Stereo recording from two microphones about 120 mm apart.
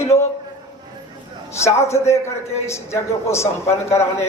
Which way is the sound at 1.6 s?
25° left (ahead or behind).